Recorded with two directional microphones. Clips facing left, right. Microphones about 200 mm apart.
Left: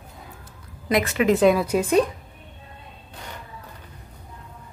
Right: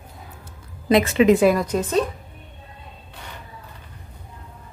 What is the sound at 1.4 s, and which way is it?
Speech, 5° left (ahead or behind).